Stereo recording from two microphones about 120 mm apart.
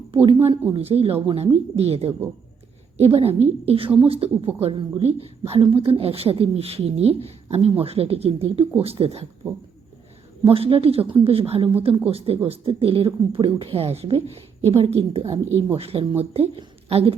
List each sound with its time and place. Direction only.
0.1 s a woman's voice: 45° right (ahead or behind)
9.4 s speech: 15° right (ahead or behind)
10.4 s a woman's voice: 50° right (ahead or behind)
15.2 s speech: 25° right (ahead or behind)
15.7 s a woman's voice: 55° right (ahead or behind)